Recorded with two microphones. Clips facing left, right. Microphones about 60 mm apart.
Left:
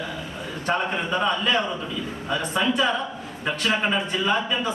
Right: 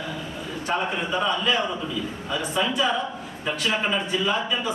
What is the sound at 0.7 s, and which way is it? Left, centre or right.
Speech, centre.